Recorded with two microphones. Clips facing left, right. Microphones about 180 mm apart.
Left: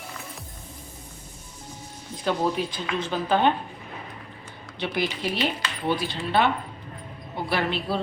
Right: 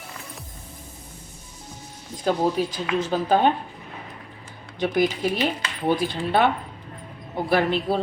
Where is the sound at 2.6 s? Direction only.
40° right (ahead or behind).